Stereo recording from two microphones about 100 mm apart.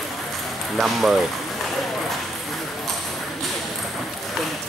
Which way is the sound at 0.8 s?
Centre (ahead or behind).